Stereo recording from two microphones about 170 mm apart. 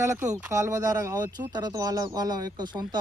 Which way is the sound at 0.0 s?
15° right (ahead or behind).